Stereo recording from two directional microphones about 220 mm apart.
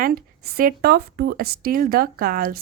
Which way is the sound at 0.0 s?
45° right (ahead or behind).